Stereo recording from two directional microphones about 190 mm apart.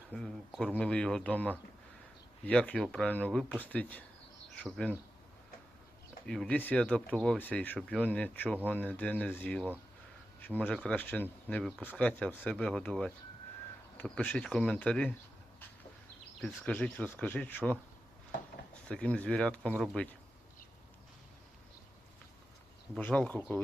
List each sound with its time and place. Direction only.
0.1 s speech: 5° left (ahead or behind)
6.2 s speech: 5° left (ahead or behind)
16.4 s speech: 5° left (ahead or behind)
18.9 s speech: 5° left (ahead or behind)
23.0 s speech: 5° left (ahead or behind)